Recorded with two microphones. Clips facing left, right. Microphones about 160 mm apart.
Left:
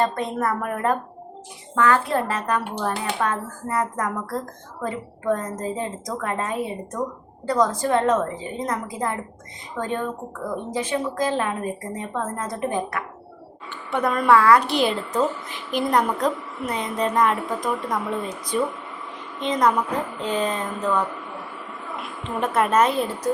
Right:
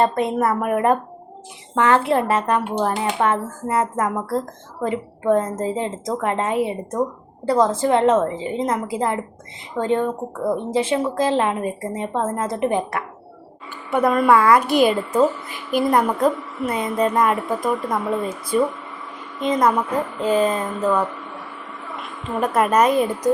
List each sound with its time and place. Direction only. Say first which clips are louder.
0.0 s speech: right 4 dB; 20° right (ahead or behind)
13.9 s a woman's voice: right 3 dB; 5° right (ahead or behind)
14.7 s speech: right 5 dB; 50° right (ahead or behind)
15.1 s a woman's voice: right 5 dB; 5° right (ahead or behind)
22.0 s a woman's voice: right 3 dB; centre (ahead or behind)
23.3 s a woman's voice: right 5 dB; 15° right (ahead or behind)